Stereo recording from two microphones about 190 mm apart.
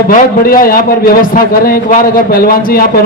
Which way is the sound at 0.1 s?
50° left (ahead or behind).